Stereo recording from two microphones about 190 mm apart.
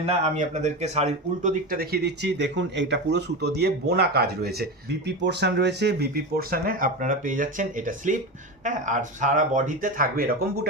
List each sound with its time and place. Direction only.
0.0 s speech: 35° right (ahead or behind)